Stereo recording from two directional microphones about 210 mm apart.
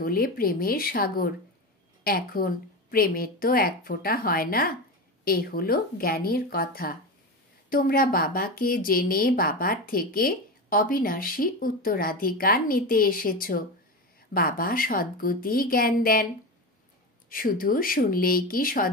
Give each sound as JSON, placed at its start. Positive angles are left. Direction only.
{"t": 0.0, "sound": "a woman's voice", "side_deg": 45}
{"t": 17.3, "sound": "a woman's voice", "side_deg": 40}